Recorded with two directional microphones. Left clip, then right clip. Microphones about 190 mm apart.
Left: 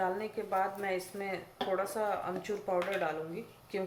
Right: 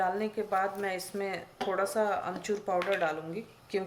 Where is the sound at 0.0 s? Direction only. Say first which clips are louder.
Right 4 dB; 50° right (ahead or behind).